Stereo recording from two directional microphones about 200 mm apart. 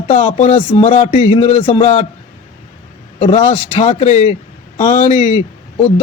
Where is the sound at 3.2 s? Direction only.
30° left (ahead or behind).